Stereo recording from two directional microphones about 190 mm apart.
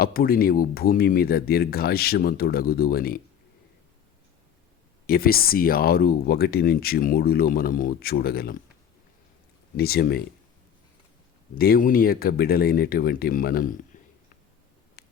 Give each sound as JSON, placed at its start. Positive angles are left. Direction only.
{"t": 0.0, "sound": "speech", "side_deg": 50}
{"t": 5.0, "sound": "speech", "side_deg": 50}
{"t": 9.7, "sound": "speech", "side_deg": 55}
{"t": 11.5, "sound": "speech", "side_deg": 50}
{"t": 15.0, "sound": "a sound", "side_deg": 55}